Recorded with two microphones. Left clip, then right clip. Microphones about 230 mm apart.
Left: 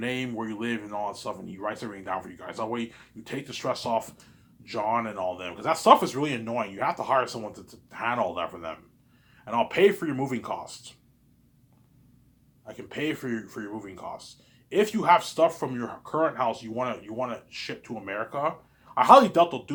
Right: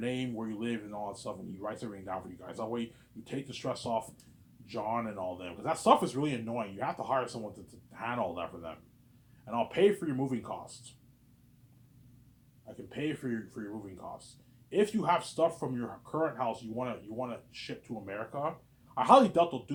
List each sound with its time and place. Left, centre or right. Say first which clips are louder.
0.0 s speech: left 5 dB; centre
12.6 s speech: left 6 dB; left